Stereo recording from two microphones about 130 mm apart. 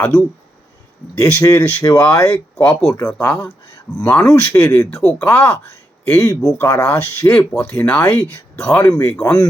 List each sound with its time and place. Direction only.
0.0 s speech: 15° left (ahead or behind)
1.4 s speech: 25° left (ahead or behind)